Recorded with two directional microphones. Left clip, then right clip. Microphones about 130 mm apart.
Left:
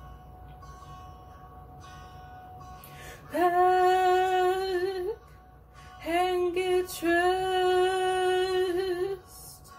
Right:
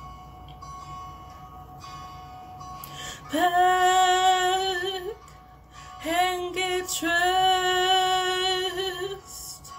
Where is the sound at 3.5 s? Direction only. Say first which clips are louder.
Right 3 dB; 20° right (ahead or behind).